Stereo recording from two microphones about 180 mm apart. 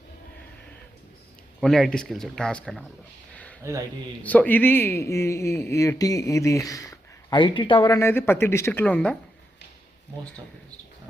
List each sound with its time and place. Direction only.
1.6 s speech: centre (ahead or behind)
4.2 s speech: 10° left (ahead or behind)